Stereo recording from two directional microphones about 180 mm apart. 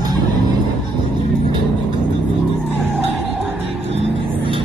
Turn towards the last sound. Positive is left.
turn(degrees=-30)  # may be behind; listen again after turning